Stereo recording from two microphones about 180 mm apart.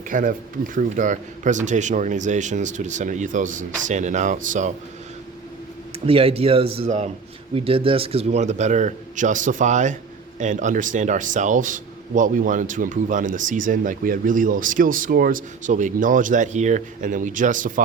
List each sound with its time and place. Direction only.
0.1 s a man's voice: 50° right (ahead or behind)
6.1 s a man's voice: 30° right (ahead or behind); by 17.8 s 45° right (ahead or behind)